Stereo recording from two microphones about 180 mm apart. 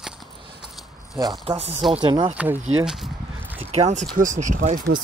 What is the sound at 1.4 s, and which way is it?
Speech, 35° right (ahead or behind).